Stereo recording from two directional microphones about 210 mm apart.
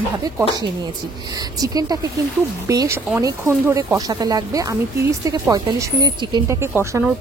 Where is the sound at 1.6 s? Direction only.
15° right (ahead or behind).